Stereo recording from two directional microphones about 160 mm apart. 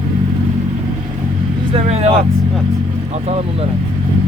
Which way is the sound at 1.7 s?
40° right (ahead or behind).